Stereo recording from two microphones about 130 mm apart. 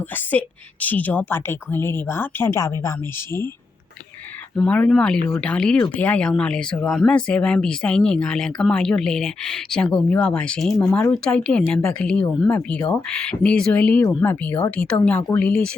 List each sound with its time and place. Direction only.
0.3 s speech: 10° left (ahead or behind)
4.5 s speech: 10° left (ahead or behind)